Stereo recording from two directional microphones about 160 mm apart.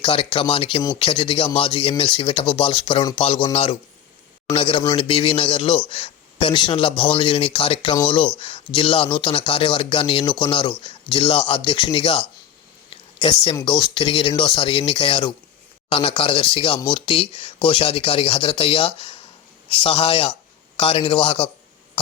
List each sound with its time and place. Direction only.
0.0 s speech: 30° left (ahead or behind)
12.9 s a sound: 35° left (ahead or behind)
13.7 s speech: 30° left (ahead or behind)